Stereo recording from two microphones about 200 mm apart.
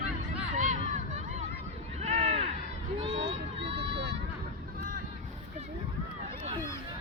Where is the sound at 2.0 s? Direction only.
30° right (ahead or behind).